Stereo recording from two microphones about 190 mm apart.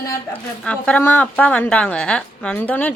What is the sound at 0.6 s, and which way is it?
A woman's voice, 5° left (ahead or behind).